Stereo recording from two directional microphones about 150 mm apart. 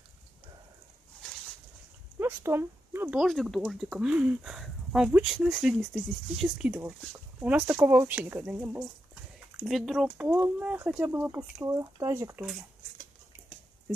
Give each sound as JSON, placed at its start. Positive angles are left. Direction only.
{"t": 2.1, "sound": "speech", "side_deg": -15}
{"t": 3.3, "sound": "speech", "side_deg": 0}
{"t": 6.7, "sound": "speech", "side_deg": -15}
{"t": 9.7, "sound": "speech", "side_deg": 0}